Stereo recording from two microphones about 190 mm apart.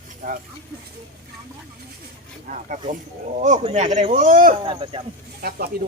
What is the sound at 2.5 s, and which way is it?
Speech, 40° right (ahead or behind).